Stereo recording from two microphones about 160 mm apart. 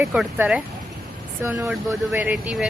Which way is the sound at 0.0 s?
Centre (ahead or behind).